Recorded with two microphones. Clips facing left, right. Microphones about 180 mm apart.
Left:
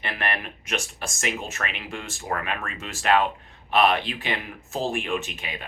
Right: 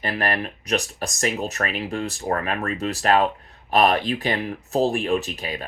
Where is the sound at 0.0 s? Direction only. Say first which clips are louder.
Right 5 dB; 40° right (ahead or behind).